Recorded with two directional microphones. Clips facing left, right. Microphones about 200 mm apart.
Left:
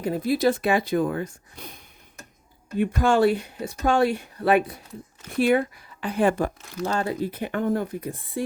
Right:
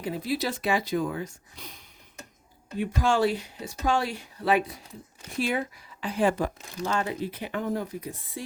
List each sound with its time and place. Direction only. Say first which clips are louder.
0.0 s speech: left 7 dB; 50° left (ahead or behind)
6.8 s speech: left 3 dB; 40° left (ahead or behind); by 8.4 s 55° left (ahead or behind)